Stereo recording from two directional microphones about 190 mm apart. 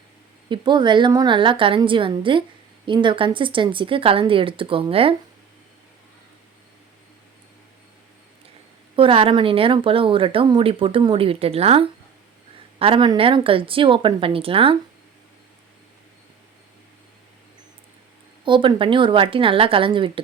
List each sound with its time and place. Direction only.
0.4 s speech: 25° right (ahead or behind)
9.0 s speech: 30° right (ahead or behind)
18.4 s speech: 25° right (ahead or behind)